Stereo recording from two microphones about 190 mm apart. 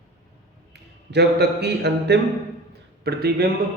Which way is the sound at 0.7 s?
60° right (ahead or behind).